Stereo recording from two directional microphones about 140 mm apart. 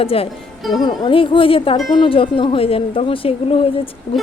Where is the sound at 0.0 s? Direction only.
45° left (ahead or behind).